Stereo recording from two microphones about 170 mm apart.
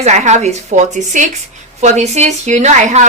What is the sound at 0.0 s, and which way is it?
Speech, 40° right (ahead or behind).